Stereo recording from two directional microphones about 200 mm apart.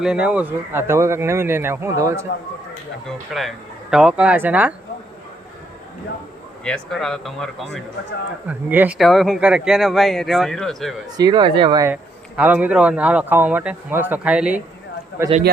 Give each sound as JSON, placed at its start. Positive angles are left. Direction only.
{"t": 0.0, "sound": "speech", "side_deg": -5}
{"t": 3.3, "sound": "speech", "side_deg": 0}
{"t": 6.7, "sound": "speech", "side_deg": 5}
{"t": 11.2, "sound": "speech", "side_deg": -20}
{"t": 12.4, "sound": "speech", "side_deg": -10}